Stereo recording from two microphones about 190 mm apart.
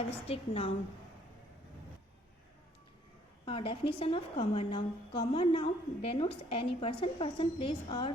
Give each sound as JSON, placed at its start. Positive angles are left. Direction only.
{"t": 0.3, "sound": "a woman's voice", "side_deg": 30}
{"t": 3.4, "sound": "a woman's voice", "side_deg": 30}